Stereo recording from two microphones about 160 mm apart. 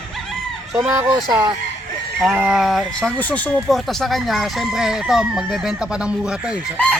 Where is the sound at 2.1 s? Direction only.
5° right (ahead or behind).